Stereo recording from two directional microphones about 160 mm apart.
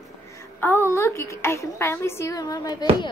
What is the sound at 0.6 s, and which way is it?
A woman's voice, 15° left (ahead or behind).